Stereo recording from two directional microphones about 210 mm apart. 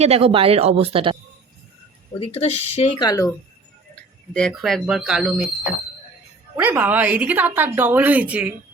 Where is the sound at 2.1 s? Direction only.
30° left (ahead or behind).